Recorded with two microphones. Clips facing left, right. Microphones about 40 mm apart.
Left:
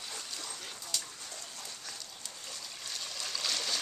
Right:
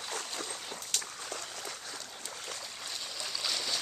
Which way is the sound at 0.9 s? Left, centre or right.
Right.